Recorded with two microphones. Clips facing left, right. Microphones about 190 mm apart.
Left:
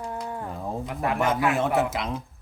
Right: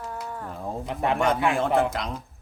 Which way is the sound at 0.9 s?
25° right (ahead or behind).